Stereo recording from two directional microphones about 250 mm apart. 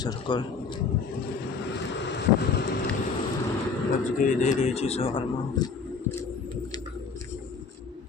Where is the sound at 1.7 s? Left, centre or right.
Left.